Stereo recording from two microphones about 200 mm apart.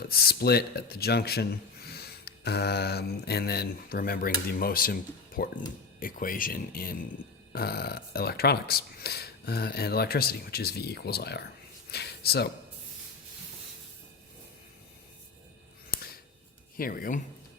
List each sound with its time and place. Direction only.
0.1 s speech: 50° left (ahead or behind)
11.9 s a sound: 55° left (ahead or behind)
16.7 s speech: 45° left (ahead or behind)